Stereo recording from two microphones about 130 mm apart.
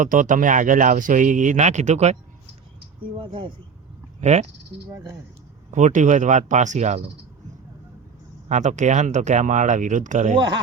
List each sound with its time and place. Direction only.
0.0 s speech: 90° right; by 2.1 s 60° right (ahead or behind)
3.0 s speech: 40° right (ahead or behind)
4.2 s speech: 60° right (ahead or behind)
4.9 s speech: 25° right (ahead or behind)
5.7 s speech: 65° right (ahead or behind)
8.4 s speech: 65° right (ahead or behind)
10.3 s speech: 35° right (ahead or behind)